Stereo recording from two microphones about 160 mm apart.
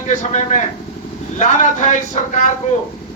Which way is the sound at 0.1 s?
50° left (ahead or behind).